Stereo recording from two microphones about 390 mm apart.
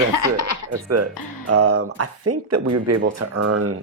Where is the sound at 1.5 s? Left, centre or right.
Right.